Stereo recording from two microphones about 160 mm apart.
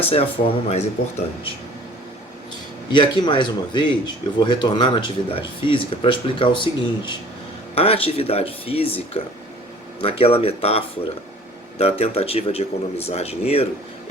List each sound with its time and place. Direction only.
0.1 s speech: 40° left (ahead or behind)
2.9 s speech: 30° left (ahead or behind)